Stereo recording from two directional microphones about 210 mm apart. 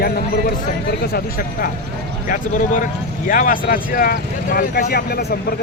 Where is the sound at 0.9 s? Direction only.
50° left (ahead or behind).